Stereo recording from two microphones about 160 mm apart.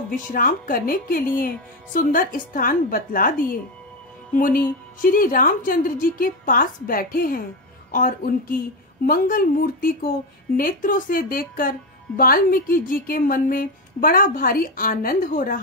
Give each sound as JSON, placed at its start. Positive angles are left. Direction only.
{"t": 0.1, "sound": "speech", "side_deg": 60}